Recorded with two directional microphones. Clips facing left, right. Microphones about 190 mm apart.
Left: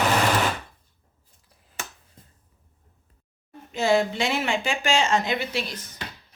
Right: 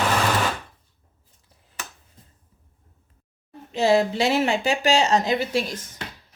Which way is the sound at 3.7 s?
35° right (ahead or behind).